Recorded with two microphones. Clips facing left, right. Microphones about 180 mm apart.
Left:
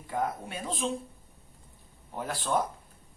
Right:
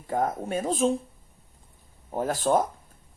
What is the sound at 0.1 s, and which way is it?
Speech, 45° right (ahead or behind).